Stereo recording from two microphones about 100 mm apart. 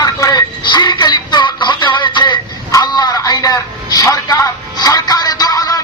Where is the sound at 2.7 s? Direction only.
40° left (ahead or behind).